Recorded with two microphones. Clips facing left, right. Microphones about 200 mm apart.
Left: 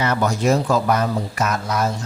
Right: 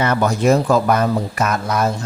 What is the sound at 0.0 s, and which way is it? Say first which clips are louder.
Speech: right 3 dB; 55° right (ahead or behind).